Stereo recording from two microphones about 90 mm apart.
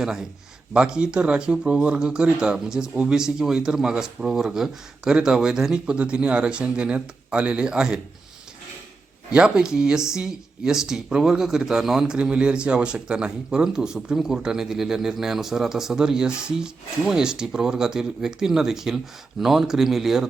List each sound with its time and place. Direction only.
0.0 s speech: 5° right (ahead or behind)
9.3 s speech: 10° right (ahead or behind)